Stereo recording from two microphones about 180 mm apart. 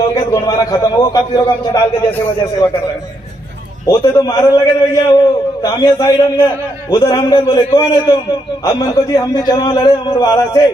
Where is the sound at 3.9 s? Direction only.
20° left (ahead or behind).